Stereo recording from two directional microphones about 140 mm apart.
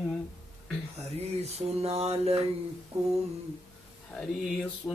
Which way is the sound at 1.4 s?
50° right (ahead or behind).